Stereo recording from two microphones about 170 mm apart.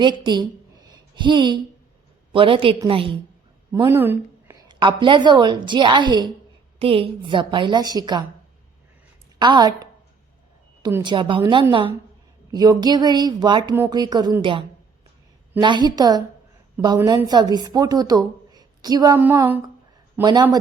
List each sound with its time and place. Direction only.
0.0 s a woman's voice: 25° right (ahead or behind)
0.9 s a sound: 25° right (ahead or behind)
2.3 s a woman's voice: 30° right (ahead or behind)
3.7 s a woman's voice: 15° right (ahead or behind)
9.4 s a woman's voice: 25° right (ahead or behind)
15.6 s a woman's voice: 25° right (ahead or behind)
17.0 s speech: 10° right (ahead or behind)
17.2 s a woman's voice: 25° right (ahead or behind)
19.2 s speech: 10° right (ahead or behind)